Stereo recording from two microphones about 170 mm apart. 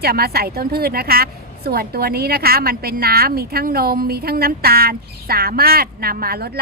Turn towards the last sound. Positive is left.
turn(degrees=-65)  # may be behind; listen again after turning